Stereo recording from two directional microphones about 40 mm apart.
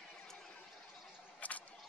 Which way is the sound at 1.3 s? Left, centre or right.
Left.